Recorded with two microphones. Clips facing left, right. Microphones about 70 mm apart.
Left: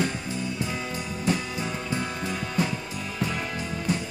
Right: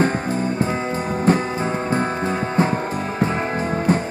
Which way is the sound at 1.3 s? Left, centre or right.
Right.